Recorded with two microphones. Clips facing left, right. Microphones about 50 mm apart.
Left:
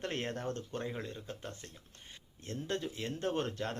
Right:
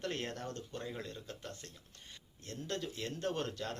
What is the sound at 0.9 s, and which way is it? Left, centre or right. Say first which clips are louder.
Speech: left 3 dB; left.